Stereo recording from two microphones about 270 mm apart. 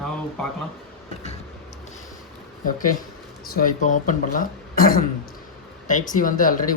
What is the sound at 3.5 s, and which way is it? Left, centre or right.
Speech, left.